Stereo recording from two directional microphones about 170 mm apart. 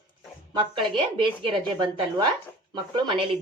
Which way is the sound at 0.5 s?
30° right (ahead or behind).